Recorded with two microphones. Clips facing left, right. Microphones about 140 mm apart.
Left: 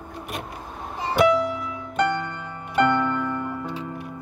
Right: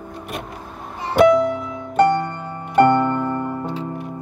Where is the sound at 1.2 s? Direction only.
40° right (ahead or behind).